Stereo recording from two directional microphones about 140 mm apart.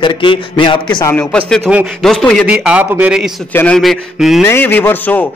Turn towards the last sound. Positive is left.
turn(degrees=15)  # may be behind; listen again after turning